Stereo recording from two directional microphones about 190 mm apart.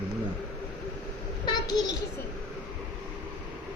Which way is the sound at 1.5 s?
20° left (ahead or behind).